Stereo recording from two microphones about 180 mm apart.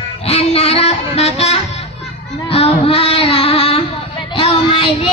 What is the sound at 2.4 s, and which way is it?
Music, 35° left (ahead or behind).